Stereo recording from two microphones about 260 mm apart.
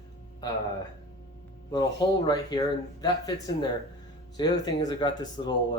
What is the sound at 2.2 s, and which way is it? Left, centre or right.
Speech, centre.